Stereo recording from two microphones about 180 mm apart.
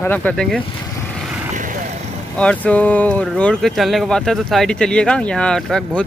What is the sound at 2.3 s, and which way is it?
Speech, 5° left (ahead or behind).